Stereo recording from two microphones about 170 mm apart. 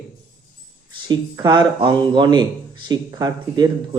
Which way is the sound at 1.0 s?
25° right (ahead or behind).